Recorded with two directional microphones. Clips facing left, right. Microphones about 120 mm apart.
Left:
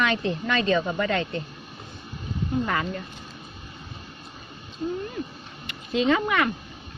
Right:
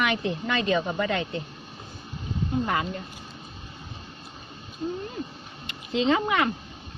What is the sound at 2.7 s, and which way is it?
Speech, 20° right (ahead or behind).